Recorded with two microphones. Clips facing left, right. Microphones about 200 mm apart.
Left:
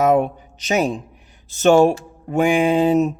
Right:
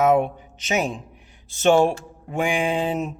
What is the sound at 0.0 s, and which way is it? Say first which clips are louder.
A man's voice: left 2 dB; 40° left (ahead or behind).